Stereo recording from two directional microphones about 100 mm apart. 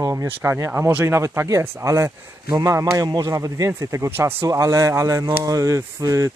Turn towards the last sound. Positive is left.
turn(degrees=-35)  # may be behind; listen again after turning